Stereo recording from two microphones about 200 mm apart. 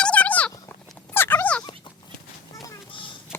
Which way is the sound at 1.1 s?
10° left (ahead or behind).